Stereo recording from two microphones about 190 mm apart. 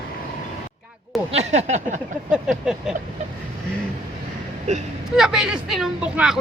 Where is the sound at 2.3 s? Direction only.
5° right (ahead or behind).